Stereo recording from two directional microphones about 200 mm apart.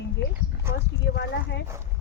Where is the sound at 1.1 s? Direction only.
60° left (ahead or behind).